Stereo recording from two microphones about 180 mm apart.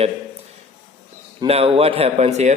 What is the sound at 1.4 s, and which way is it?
Speech, 35° right (ahead or behind).